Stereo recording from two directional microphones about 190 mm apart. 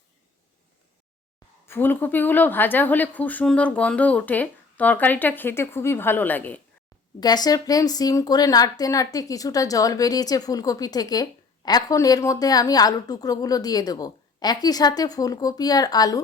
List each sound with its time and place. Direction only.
1.6 s speech: 10° left (ahead or behind)
7.2 s a woman's voice: 20° left (ahead or behind)